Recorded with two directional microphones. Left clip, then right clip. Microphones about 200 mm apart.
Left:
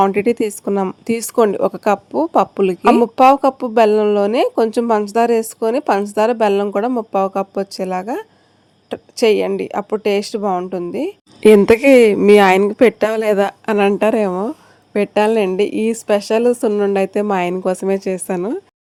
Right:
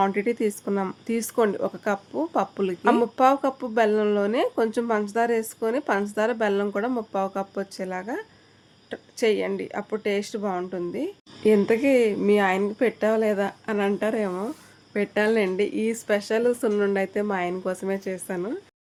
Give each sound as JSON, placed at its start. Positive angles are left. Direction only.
{"t": 0.0, "sound": "a woman's voice", "side_deg": 35}
{"t": 11.4, "sound": "a woman's voice", "side_deg": 50}